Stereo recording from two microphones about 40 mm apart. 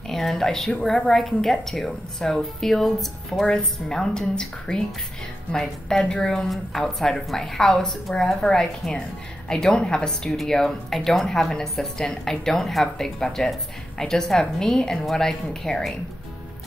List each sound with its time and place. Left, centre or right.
0.1 s a woman's voice: centre
3.4 s a woman's voice: centre